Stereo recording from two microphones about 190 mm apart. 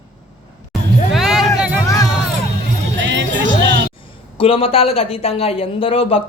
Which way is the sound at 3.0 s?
70° right (ahead or behind).